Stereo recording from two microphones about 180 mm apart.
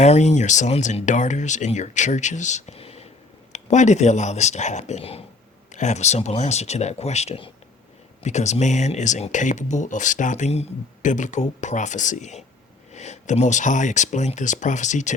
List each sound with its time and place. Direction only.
0.0 s speech: 40° left (ahead or behind)